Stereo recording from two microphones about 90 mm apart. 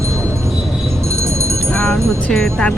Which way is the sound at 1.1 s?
35° right (ahead or behind).